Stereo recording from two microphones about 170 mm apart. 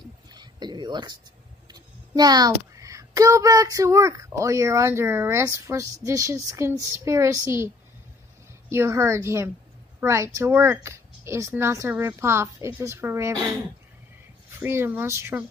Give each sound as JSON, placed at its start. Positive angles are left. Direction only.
{"t": 0.3, "sound": "a sound", "side_deg": -25}
{"t": 1.7, "sound": "a child's voice", "side_deg": -25}
{"t": 14.6, "sound": "a woman's voice", "side_deg": -15}